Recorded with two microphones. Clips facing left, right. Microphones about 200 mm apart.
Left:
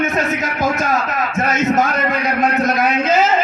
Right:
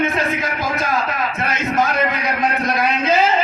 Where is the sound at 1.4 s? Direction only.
45° left (ahead or behind).